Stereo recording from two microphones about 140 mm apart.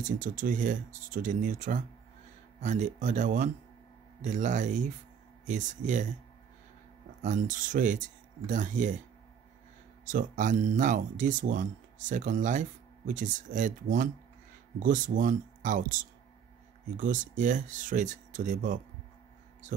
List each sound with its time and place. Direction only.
0.0 s speech: 70° right (ahead or behind)
2.6 s speech: 60° right (ahead or behind)
7.2 s speech: 60° right (ahead or behind)
10.0 s speech: 70° right (ahead or behind)